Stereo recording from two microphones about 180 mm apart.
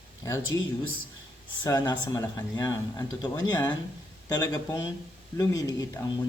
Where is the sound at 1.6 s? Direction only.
25° left (ahead or behind).